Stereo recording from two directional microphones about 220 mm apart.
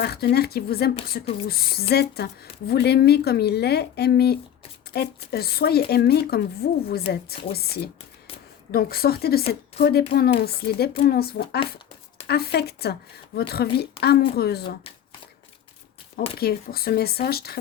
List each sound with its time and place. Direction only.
0.0 s a woman's voice: 45° left (ahead or behind)
16.4 s a woman's voice: 45° left (ahead or behind)